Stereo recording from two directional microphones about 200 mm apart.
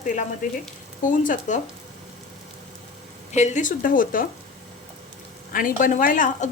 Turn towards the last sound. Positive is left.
turn(degrees=40)  # may be behind; listen again after turning